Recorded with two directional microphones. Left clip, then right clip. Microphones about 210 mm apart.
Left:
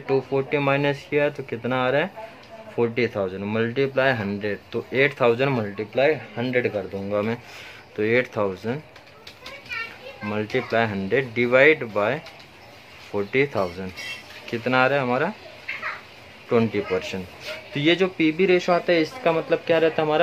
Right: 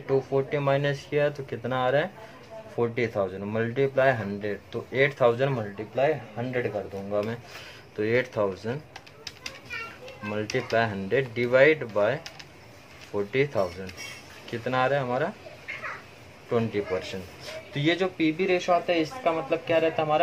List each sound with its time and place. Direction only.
0.0 s speech: 30° left (ahead or behind)
8.0 s speech: 20° left (ahead or behind)
10.3 s speech: 20° left (ahead or behind)
16.4 s speech: 30° left (ahead or behind); by 20.2 s 45° left (ahead or behind)